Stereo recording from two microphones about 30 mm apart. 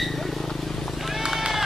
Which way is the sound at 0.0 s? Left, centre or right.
Centre.